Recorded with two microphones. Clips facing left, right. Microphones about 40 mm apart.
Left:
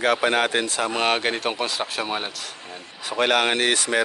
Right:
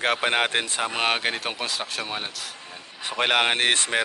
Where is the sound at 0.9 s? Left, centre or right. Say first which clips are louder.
Left 2 dB; centre.